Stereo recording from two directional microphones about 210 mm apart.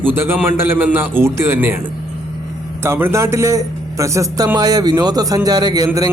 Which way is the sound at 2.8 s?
10° right (ahead or behind).